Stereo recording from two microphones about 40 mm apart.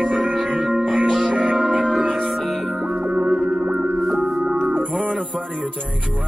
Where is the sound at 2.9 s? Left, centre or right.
Centre.